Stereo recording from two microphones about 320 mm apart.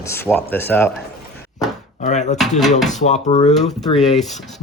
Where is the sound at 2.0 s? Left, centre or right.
Left.